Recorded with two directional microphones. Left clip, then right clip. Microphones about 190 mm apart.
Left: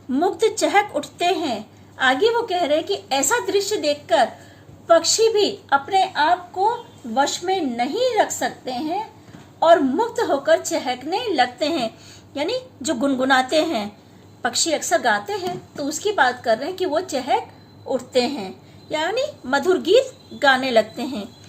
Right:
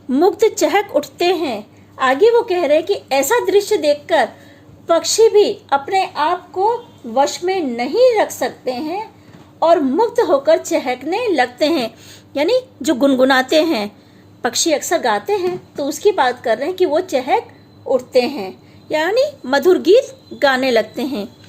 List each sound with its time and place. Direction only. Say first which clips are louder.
0.1 s a woman's voice: right 6 dB; 40° right (ahead or behind)
7.9 s a woman's voice: right 8 dB; 35° right (ahead or behind)